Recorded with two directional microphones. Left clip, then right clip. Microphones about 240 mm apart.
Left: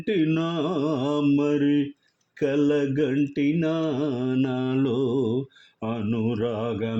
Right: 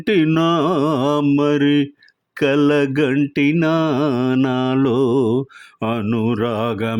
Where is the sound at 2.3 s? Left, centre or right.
Right.